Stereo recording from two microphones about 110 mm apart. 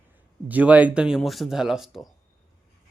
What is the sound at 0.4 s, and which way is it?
Speech, 15° right (ahead or behind).